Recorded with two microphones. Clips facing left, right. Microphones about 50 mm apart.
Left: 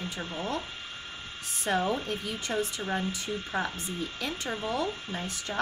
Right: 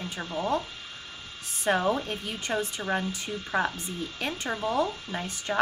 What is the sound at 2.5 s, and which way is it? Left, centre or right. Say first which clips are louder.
Speech: right 2 dB; right.